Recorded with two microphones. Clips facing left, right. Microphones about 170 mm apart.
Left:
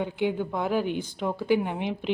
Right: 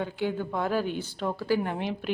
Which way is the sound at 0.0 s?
15° left (ahead or behind).